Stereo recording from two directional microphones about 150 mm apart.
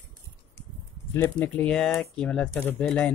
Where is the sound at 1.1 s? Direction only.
10° left (ahead or behind).